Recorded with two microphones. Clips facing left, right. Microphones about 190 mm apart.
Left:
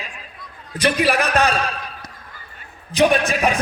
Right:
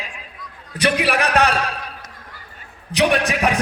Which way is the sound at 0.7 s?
60° right (ahead or behind).